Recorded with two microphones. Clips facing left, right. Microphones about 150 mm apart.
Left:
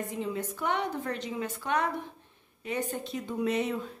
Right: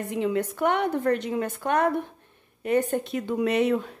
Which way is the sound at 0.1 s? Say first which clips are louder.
Right 8 dB; 75° right (ahead or behind).